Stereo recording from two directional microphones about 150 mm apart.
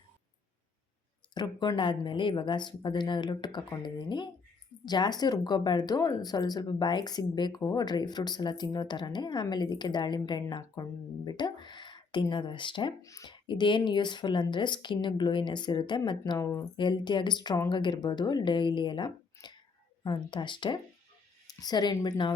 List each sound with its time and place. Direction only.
1.3 s speech: 30° left (ahead or behind)
13.0 s speech: 20° left (ahead or behind)